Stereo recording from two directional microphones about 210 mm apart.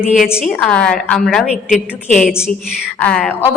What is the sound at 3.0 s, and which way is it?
Speech, 5° left (ahead or behind).